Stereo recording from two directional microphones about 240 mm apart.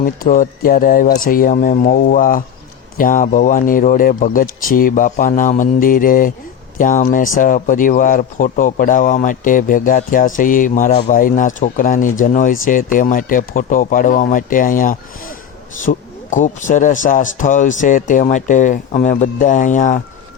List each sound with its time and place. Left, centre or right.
0.0 s speech: left